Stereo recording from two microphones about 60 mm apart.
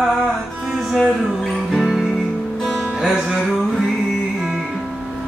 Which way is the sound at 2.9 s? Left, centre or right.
Centre.